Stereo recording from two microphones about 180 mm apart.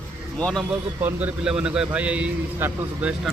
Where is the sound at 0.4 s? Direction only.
5° left (ahead or behind).